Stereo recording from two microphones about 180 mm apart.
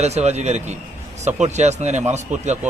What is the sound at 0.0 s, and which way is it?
A man's voice, 40° right (ahead or behind).